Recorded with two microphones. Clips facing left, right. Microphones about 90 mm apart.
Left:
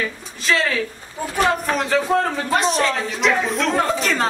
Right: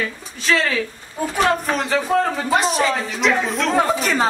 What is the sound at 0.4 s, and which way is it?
Speech, centre (ahead or behind).